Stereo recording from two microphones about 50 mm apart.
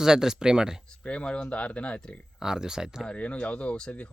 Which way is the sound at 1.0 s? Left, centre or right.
Left.